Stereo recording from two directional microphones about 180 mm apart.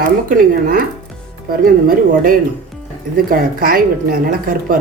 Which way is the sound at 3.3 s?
55° right (ahead or behind).